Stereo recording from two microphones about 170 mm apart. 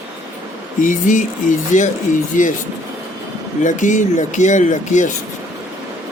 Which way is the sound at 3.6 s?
45° left (ahead or behind).